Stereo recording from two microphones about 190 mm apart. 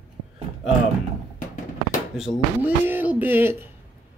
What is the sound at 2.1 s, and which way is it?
Speech, 5° right (ahead or behind).